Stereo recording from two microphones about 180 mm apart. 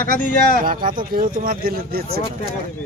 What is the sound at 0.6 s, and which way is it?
Speech, 50° right (ahead or behind).